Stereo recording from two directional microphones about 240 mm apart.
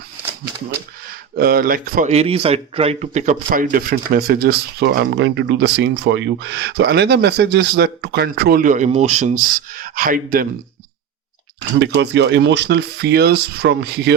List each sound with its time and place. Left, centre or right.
1.4 s speech: right
11.8 s speech: right